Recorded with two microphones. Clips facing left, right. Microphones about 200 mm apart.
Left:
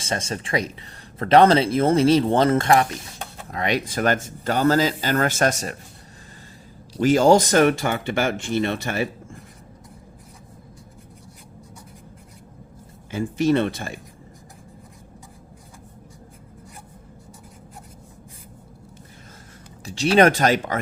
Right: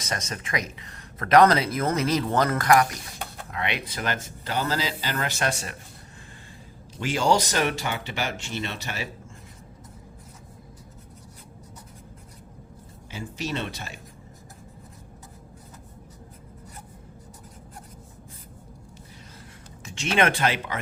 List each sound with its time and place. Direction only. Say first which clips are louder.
0.0 s speech: left 5 dB; 30° left (ahead or behind)
3.5 s speech: left 8 dB; 40° left (ahead or behind)
6.9 s speech: left 8 dB; 40° left (ahead or behind)
13.1 s speech: left 12 dB; 50° left (ahead or behind)
19.8 s speech: left 8 dB; 35° left (ahead or behind)